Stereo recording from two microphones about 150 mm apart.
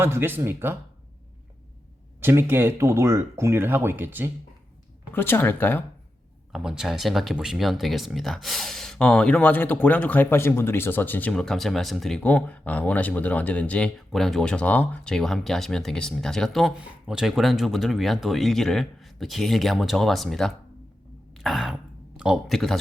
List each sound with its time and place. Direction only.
0.0 s speech: 15° right (ahead or behind)
2.2 s speech: 15° right (ahead or behind)
5.1 s speech: 15° left (ahead or behind)
6.5 s speech: 5° right (ahead or behind)
21.3 s throat clearing: centre (ahead or behind)
22.2 s speech: centre (ahead or behind)